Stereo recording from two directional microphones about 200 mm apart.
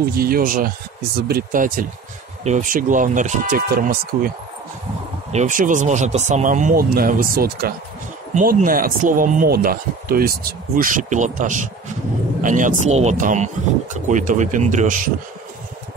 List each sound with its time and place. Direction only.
0.1 s speech: 50° right (ahead or behind)
5.3 s speech: 40° right (ahead or behind)